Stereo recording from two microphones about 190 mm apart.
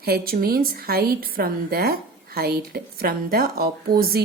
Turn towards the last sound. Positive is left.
turn(degrees=-55)  # may be behind; listen again after turning